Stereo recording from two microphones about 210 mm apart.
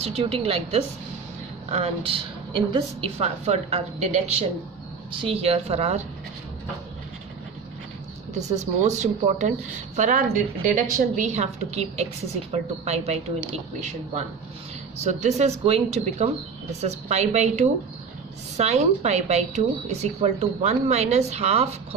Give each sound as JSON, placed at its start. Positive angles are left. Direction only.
{"t": 0.0, "sound": "a woman's voice", "side_deg": -30}
{"t": 8.4, "sound": "a woman's voice", "side_deg": -35}
{"t": 15.0, "sound": "a woman's voice", "side_deg": -30}